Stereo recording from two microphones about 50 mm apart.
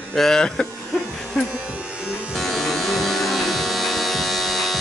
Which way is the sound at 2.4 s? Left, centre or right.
Centre.